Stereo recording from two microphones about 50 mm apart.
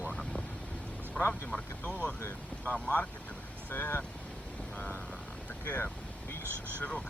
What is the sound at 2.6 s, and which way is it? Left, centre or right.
Speech, left.